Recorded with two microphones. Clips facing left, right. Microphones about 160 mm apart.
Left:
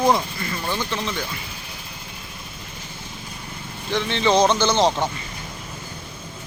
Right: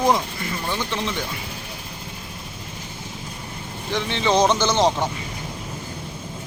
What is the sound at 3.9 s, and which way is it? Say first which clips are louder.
A man's voice: left 1 dB; 15° right (ahead or behind).